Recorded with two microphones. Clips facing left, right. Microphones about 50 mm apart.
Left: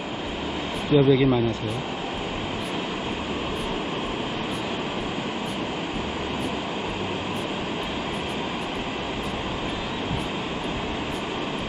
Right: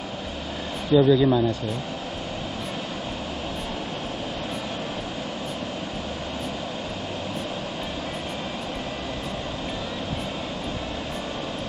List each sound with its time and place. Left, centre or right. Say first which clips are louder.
0.9 s speech: right 1 dB; left